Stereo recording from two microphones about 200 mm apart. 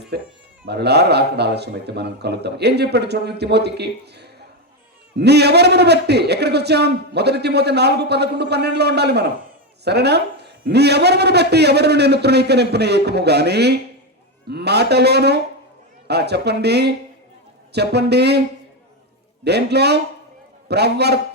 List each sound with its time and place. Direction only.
0.1 s a man's voice: 55° right (ahead or behind)
19.5 s a man's voice: 55° right (ahead or behind)